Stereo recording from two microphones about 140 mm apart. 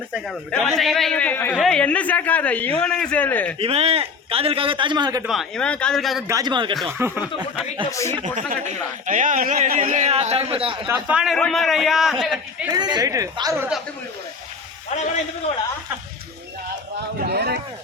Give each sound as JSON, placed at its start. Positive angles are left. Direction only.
{"t": 0.1, "sound": "a man's voice", "side_deg": 0}
{"t": 3.6, "sound": "a man's voice", "side_deg": -45}
{"t": 5.2, "sound": "a man's voice", "side_deg": 0}
{"t": 6.2, "sound": "a man's voice", "side_deg": -25}
{"t": 7.0, "sound": "speech", "side_deg": -20}
{"t": 7.9, "sound": "speech", "side_deg": 20}
{"t": 8.1, "sound": "speech", "side_deg": -60}
{"t": 10.8, "sound": "speech", "side_deg": -15}
{"t": 11.2, "sound": "a man's voice", "side_deg": 0}
{"t": 12.6, "sound": "speech", "side_deg": -30}
{"t": 17.2, "sound": "a sound", "side_deg": -90}